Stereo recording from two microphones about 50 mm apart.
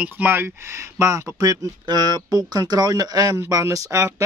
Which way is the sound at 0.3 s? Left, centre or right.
Right.